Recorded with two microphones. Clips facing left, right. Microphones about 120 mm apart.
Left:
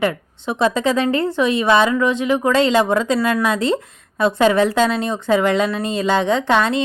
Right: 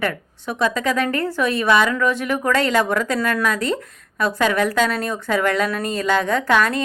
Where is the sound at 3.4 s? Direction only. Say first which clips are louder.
Left 3 dB; 30° left (ahead or behind).